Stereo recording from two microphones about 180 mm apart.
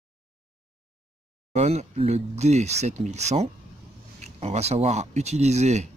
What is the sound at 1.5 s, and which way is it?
Speech, 35° right (ahead or behind).